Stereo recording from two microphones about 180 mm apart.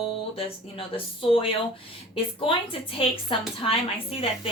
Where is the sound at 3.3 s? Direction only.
30° left (ahead or behind).